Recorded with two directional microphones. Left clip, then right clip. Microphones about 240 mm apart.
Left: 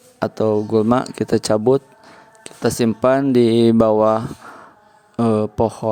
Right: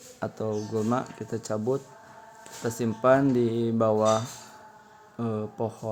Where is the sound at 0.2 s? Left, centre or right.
Left.